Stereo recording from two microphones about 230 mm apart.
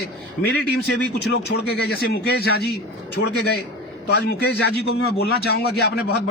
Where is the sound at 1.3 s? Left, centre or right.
Left.